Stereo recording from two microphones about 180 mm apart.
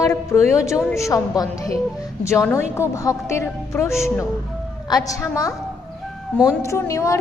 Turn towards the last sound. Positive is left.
turn(degrees=15)  # may be behind; listen again after turning